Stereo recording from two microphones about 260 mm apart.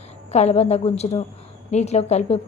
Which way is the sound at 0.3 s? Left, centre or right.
Left.